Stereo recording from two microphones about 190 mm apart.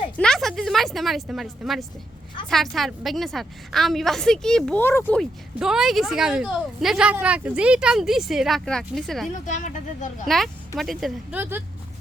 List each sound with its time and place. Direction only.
0.2 s a woman's voice: centre (ahead or behind)
9.5 s speech: 40° left (ahead or behind)
10.2 s a woman's voice: centre (ahead or behind)